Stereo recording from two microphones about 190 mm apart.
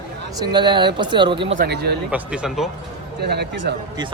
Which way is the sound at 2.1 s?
5° right (ahead or behind).